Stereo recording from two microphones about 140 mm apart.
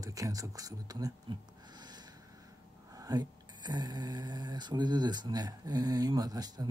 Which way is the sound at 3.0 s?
25° right (ahead or behind).